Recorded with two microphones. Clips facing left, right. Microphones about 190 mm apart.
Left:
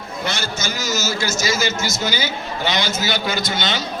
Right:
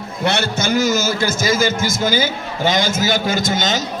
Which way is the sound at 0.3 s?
65° right (ahead or behind).